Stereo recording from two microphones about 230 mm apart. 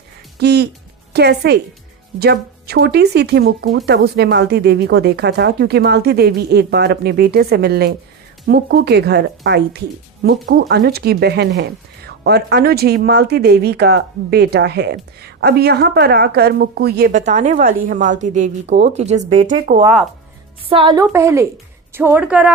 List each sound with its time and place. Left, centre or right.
0.3 s speech: right
19.8 s speech: centre
20.7 s a woman's voice: right; by 22.5 s centre